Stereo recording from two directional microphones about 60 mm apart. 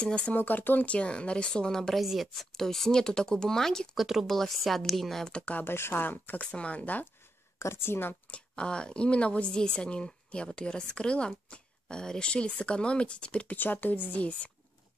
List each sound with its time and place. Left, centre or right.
0.0 s speech: centre
0.4 s speech: left; by 2.0 s centre
2.0 s speech: centre
3.9 s a woman's voice: centre
5.2 s speech: centre
5.6 s speech: left
6.4 s speech: centre
7.5 s speech: left
8.3 s speech: centre
13.6 s speech: left